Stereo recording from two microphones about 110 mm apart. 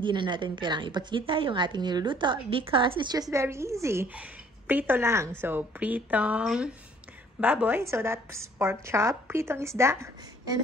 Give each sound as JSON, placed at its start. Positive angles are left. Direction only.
{"t": 0.0, "sound": "a woman's voice", "side_deg": -45}
{"t": 4.1, "sound": "a woman's voice", "side_deg": -15}